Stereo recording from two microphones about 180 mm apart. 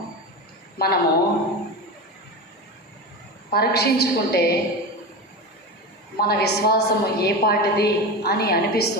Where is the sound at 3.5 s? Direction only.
60° left (ahead or behind).